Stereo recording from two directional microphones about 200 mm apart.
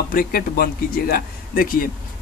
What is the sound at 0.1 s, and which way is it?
Speech, 45° left (ahead or behind).